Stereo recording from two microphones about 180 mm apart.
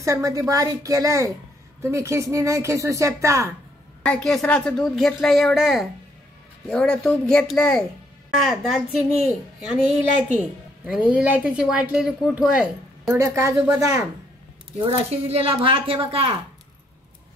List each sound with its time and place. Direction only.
0.0 s speech: 15° right (ahead or behind)
4.0 s a woman's voice: 5° left (ahead or behind)
13.2 s speech: 15° right (ahead or behind)
14.8 s a woman's voice: 35° right (ahead or behind)